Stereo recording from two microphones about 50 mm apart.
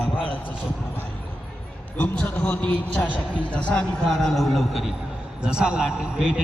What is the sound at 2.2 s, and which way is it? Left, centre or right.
Speech, left.